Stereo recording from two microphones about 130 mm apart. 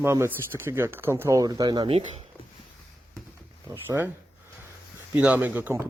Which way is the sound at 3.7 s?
20° right (ahead or behind).